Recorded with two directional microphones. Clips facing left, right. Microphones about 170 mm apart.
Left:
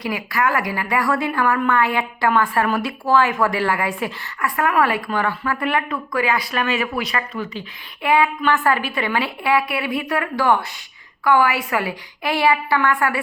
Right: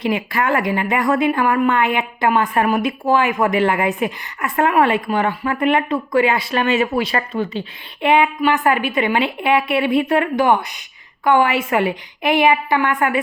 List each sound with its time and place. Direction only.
0.0 s a woman's voice: 25° right (ahead or behind)